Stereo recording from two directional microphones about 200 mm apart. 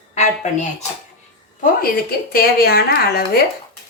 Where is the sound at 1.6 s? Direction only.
45° left (ahead or behind).